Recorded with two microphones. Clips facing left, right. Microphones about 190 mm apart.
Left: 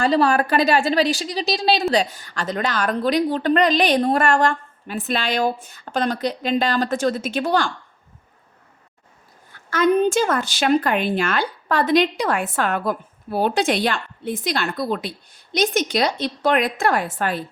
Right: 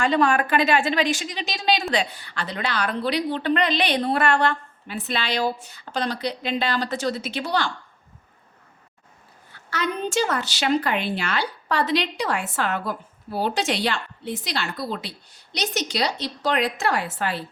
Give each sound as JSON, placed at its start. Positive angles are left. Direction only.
{"t": 0.0, "sound": "a woman's voice", "side_deg": 35}
{"t": 9.6, "sound": "a woman's voice", "side_deg": 50}